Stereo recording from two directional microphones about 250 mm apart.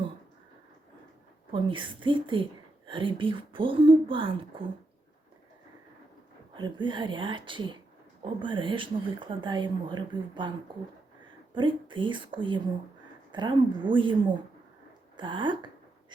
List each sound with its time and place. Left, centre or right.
1.5 s a woman's voice: centre
6.6 s a woman's voice: centre
11.5 s a woman's voice: centre
15.1 s a sound: centre